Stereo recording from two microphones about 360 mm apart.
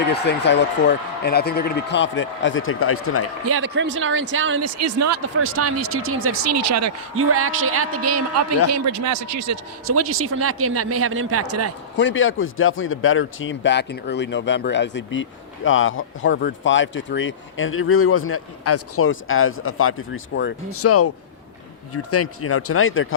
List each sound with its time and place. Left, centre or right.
0.1 s speech: left
3.5 s speech: right
11.9 s a man's voice: left